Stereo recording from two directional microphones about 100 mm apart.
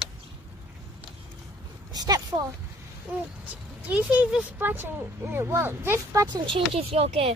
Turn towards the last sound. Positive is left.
turn(degrees=-80)